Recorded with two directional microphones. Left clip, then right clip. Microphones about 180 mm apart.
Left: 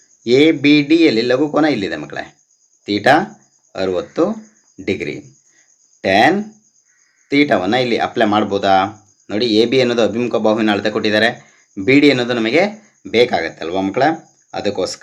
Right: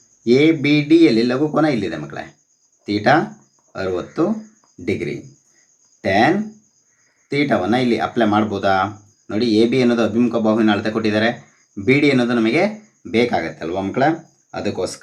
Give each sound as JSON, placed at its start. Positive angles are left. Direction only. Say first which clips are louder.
{"t": 0.3, "sound": "speech", "louder": "left 3 dB", "side_deg": 25}